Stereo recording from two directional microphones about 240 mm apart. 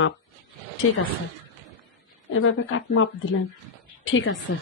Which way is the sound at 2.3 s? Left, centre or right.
Left.